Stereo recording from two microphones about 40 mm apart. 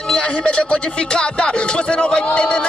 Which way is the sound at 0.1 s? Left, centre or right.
Left.